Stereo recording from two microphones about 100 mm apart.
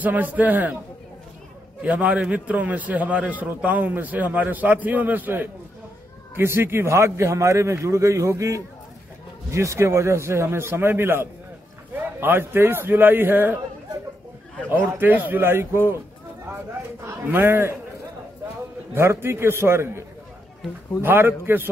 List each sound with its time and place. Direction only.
0.0 s a man's voice: 15° right (ahead or behind)
1.8 s a man's voice: 15° right (ahead or behind)
14.9 s a man's voice: 20° right (ahead or behind)
17.0 s speech: 25° right (ahead or behind)
18.9 s a man's voice: 25° right (ahead or behind)
21.0 s a man's voice: 20° right (ahead or behind)